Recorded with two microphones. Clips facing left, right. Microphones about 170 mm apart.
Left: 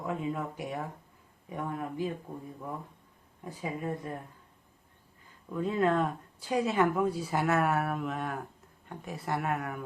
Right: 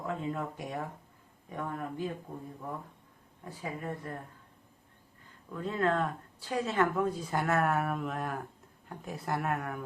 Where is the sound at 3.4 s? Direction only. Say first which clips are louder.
Left 3 dB; 15° left (ahead or behind).